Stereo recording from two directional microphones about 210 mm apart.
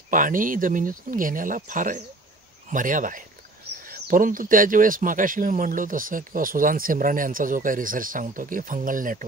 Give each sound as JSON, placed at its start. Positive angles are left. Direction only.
{"t": 0.1, "sound": "speech", "side_deg": -40}